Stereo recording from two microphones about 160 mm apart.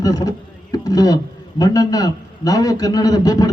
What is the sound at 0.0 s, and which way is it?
A man's voice, 25° left (ahead or behind).